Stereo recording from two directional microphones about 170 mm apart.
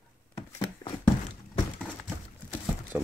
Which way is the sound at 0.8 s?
20° left (ahead or behind).